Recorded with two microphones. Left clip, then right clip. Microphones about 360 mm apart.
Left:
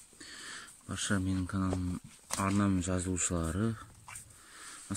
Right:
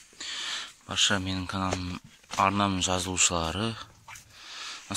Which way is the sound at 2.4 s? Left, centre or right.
Centre.